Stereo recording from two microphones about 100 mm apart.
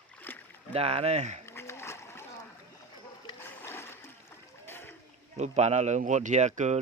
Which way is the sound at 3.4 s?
25° left (ahead or behind).